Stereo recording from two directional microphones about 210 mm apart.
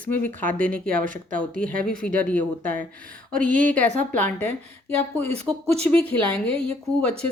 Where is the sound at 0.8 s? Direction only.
40° right (ahead or behind).